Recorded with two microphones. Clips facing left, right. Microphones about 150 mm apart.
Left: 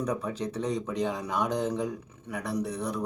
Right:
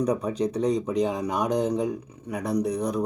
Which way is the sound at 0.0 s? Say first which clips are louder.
Right 6 dB; 15° right (ahead or behind).